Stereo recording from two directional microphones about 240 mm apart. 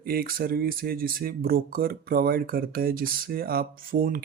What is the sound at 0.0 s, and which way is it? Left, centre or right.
Speech, right.